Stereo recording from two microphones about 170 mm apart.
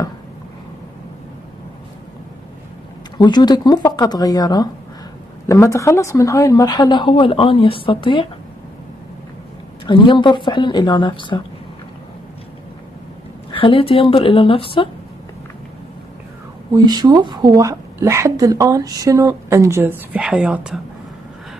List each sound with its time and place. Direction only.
3.2 s a woman's voice: 25° left (ahead or behind)
9.8 s a woman's voice: 30° left (ahead or behind)
13.5 s a woman's voice: 30° left (ahead or behind)
16.7 s a woman's voice: 25° right (ahead or behind); by 20.8 s 5° right (ahead or behind)